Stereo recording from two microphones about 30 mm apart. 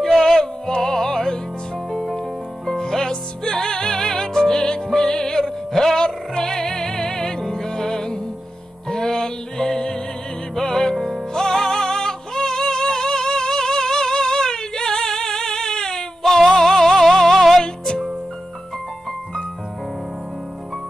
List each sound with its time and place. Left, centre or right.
0.2 s music: centre